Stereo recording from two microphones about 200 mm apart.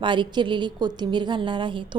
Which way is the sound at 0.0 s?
25° right (ahead or behind).